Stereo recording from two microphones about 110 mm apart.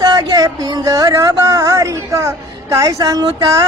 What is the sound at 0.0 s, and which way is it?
Speech, 35° right (ahead or behind).